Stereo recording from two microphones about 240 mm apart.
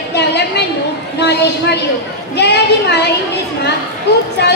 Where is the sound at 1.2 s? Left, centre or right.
Left.